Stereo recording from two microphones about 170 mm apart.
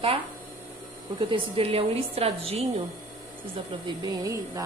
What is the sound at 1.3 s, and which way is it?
A woman's voice, 35° right (ahead or behind).